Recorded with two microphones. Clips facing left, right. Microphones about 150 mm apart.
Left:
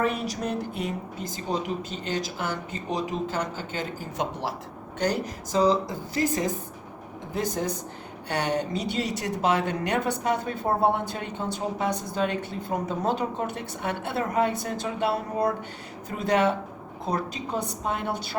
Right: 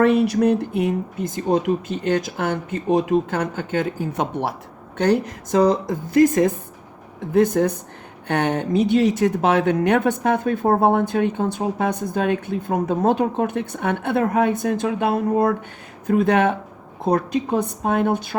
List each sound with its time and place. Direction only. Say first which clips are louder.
0.3 s a woman's voice: right 11 dB; 65° right (ahead or behind)